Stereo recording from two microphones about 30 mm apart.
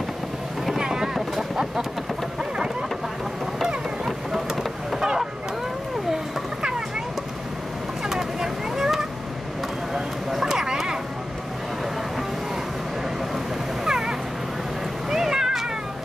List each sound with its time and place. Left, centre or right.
0.7 s boat: right
3.6 s vehicle: centre
8.1 s vehicle: centre
10.4 s a sound: centre
13.8 s cat: right
15.0 s a sound: centre